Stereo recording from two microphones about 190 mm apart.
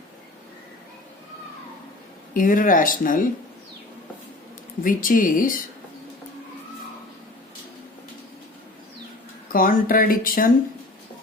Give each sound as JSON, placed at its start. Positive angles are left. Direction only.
{"t": 2.3, "sound": "speech", "side_deg": 45}
{"t": 4.8, "sound": "speech", "side_deg": 45}
{"t": 9.5, "sound": "speech", "side_deg": 50}